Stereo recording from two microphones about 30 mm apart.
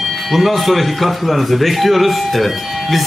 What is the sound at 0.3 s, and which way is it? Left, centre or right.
A man's voice, centre.